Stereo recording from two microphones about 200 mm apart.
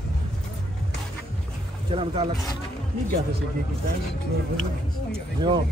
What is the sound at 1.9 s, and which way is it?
Speech, 25° right (ahead or behind).